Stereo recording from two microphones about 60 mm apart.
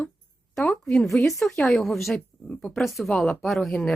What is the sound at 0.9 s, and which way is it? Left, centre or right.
Speech, centre.